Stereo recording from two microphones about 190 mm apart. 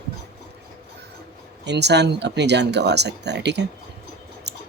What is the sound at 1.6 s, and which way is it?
Speech, 65° right (ahead or behind).